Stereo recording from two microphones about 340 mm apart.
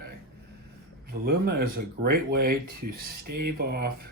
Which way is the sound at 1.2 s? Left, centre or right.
Right.